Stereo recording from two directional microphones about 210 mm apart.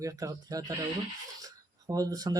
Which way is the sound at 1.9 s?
15° right (ahead or behind).